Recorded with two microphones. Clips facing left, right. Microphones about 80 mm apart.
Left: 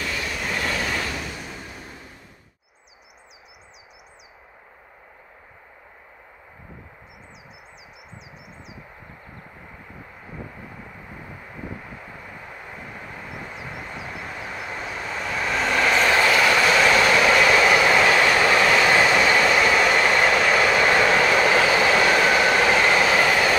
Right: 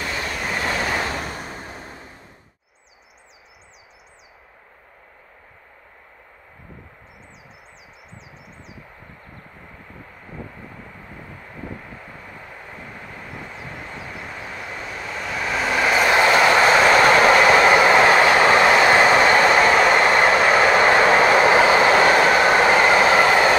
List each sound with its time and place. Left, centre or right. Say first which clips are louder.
0.0 s train: right 2 dB; right
0.6 s waves: right 4 dB; right
8.2 s a sound: even; centre
12.7 s vehicle: even; centre
16.3 s train: right 4 dB; right